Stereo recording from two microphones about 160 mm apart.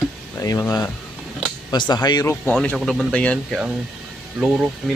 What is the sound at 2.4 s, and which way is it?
Speech, 5° left (ahead or behind).